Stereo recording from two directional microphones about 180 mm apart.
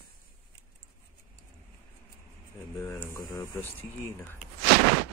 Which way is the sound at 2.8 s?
15° left (ahead or behind).